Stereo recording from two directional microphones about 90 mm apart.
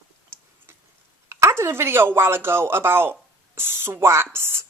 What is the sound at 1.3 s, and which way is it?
Speech, 30° right (ahead or behind).